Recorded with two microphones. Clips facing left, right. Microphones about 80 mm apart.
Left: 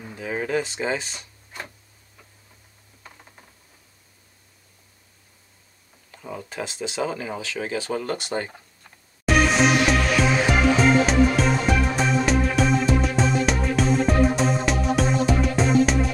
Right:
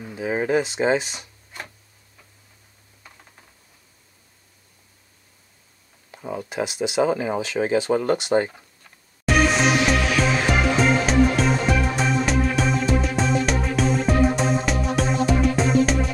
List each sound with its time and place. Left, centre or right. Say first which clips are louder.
0.2 s speech: right 4 dB; centre
6.1 s speech: right 5 dB; centre
9.2 s music: even; centre